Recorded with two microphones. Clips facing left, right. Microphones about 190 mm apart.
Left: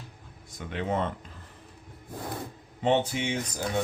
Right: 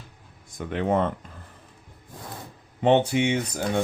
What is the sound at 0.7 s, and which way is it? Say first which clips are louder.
Speech: right 6 dB; 55° right (ahead or behind).